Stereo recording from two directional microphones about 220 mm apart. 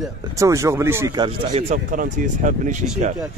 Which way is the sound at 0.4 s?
15° right (ahead or behind).